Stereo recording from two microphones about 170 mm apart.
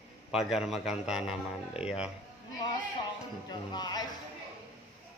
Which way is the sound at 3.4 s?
25° left (ahead or behind).